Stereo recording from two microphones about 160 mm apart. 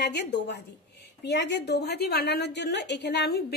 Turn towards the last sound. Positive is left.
turn(degrees=90)